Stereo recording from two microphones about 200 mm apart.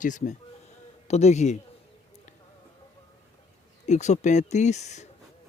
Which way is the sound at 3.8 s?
35° left (ahead or behind).